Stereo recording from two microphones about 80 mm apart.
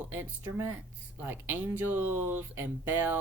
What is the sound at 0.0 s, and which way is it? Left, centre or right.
Speech, right.